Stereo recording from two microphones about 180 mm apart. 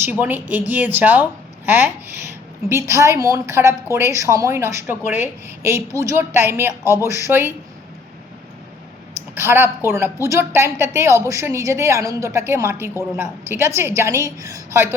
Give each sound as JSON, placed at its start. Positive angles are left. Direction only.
{"t": 0.0, "sound": "a woman's voice", "side_deg": -10}
{"t": 9.3, "sound": "a woman's voice", "side_deg": -15}